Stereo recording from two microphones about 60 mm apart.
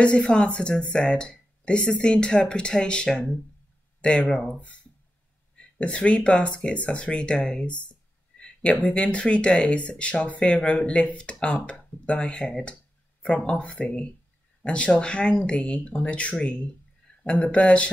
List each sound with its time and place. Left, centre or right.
0.0 s speech: centre
8.8 s speech: centre